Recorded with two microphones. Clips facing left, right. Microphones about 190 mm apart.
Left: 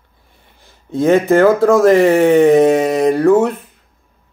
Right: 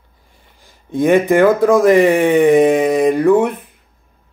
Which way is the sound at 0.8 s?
15° right (ahead or behind).